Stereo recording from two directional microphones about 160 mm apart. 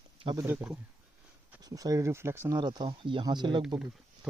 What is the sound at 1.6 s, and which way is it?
Speech, 20° right (ahead or behind).